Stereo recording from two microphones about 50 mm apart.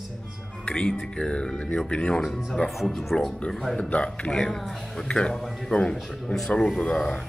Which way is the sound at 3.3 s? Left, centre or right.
Left.